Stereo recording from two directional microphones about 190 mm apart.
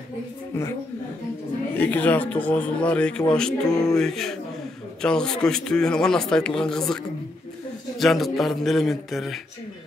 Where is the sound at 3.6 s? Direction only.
20° left (ahead or behind).